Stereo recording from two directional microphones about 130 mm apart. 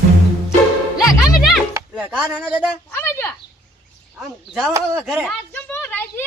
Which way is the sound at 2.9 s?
20° left (ahead or behind).